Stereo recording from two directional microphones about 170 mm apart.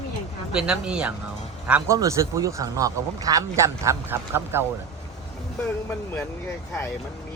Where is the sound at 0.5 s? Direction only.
5° right (ahead or behind).